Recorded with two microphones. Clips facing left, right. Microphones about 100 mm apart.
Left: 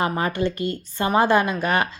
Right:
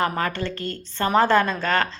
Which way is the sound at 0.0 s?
20° left (ahead or behind).